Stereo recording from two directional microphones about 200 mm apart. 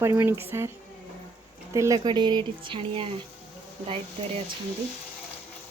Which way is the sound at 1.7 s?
15° right (ahead or behind).